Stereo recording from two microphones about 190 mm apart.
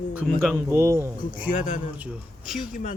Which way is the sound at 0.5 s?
15° right (ahead or behind).